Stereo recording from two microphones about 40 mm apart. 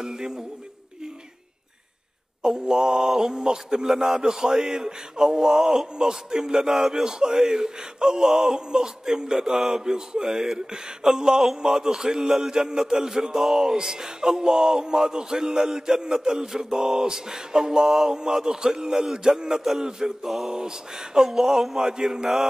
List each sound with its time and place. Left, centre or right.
0.0 s male singing: centre
2.4 s male singing: centre